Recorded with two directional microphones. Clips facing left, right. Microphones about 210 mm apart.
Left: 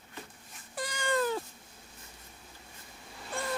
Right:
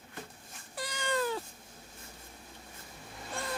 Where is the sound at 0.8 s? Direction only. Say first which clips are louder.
Left 2 dB; 50° left (ahead or behind).